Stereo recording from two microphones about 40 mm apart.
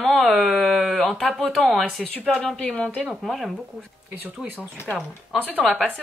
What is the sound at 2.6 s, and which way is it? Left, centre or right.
Speech, left.